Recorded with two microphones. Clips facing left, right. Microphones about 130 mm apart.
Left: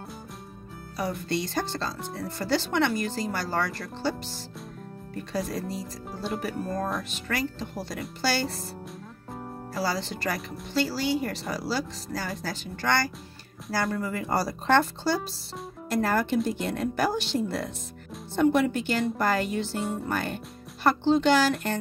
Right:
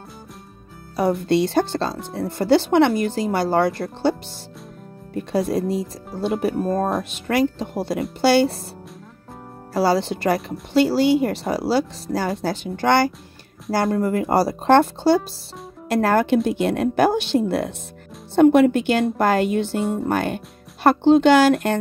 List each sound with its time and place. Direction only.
0.9 s speech: 65° right (ahead or behind)
5.3 s speech: 65° right (ahead or behind)
9.8 s speech: 65° right (ahead or behind)
15.9 s speech: 75° right (ahead or behind)